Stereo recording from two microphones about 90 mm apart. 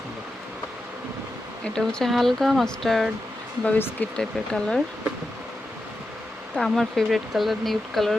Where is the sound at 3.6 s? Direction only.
20° left (ahead or behind).